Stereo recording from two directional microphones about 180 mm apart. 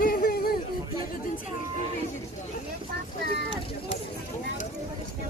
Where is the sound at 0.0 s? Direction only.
55° left (ahead or behind).